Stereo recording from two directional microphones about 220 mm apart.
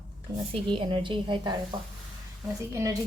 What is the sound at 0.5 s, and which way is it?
A woman's voice, 20° right (ahead or behind).